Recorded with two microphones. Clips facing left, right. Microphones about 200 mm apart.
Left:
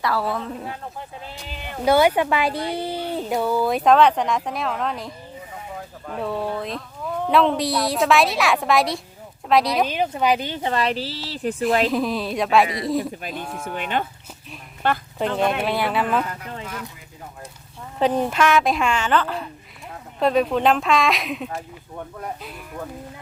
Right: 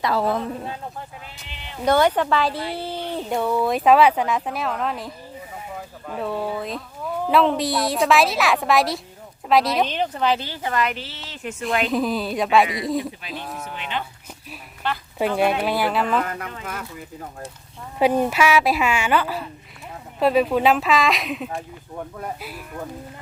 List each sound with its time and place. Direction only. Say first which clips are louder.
0.0 s a woman's voice: right 2 dB; 20° right (ahead or behind)
1.5 s speech: left 6 dB; 50° left (ahead or behind)
1.8 s a woman's voice: left 1 dB; 10° left (ahead or behind); by 11.5 s 35° left (ahead or behind)
11.9 s speech: even; centre (ahead or behind)
13.7 s speech: left 7 dB; 50° left (ahead or behind)
15.2 s speech: right 3 dB; 10° right (ahead or behind)
18.0 s a woman's voice: right 1 dB; 10° right (ahead or behind)